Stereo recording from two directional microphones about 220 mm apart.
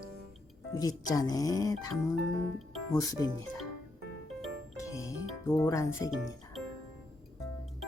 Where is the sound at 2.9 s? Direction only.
15° left (ahead or behind).